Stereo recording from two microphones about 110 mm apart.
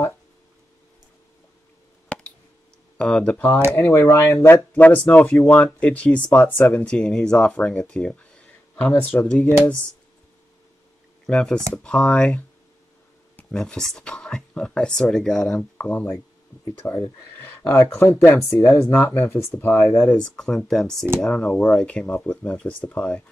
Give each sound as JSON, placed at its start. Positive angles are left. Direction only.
{"t": 2.0, "sound": "a sound", "side_deg": 10}
{"t": 3.0, "sound": "speech", "side_deg": 5}
{"t": 3.3, "sound": "speech", "side_deg": 15}
{"t": 11.2, "sound": "speech", "side_deg": 5}
{"t": 20.1, "sound": "speech", "side_deg": 5}